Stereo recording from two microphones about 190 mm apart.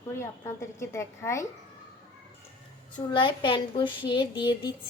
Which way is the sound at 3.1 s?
25° left (ahead or behind).